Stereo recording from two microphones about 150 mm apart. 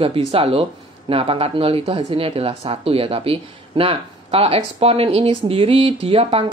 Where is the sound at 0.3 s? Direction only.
40° right (ahead or behind).